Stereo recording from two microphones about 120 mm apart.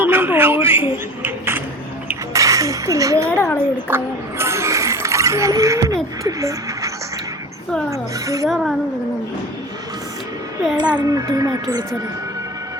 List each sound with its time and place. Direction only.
0.0 s a man's voice: 20° right (ahead or behind)
2.3 s chink: 30° right (ahead or behind)
3.3 s a woman's voice: 20° left (ahead or behind)
3.8 s speech: 20° right (ahead or behind)
8.4 s speech: centre (ahead or behind)
10.8 s a child's voice: 35° right (ahead or behind)